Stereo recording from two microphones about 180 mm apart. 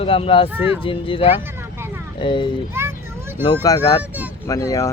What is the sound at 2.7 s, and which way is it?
Children playing, 15° right (ahead or behind).